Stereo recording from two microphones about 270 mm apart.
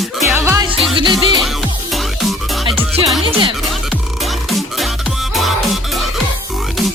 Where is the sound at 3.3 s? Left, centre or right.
Centre.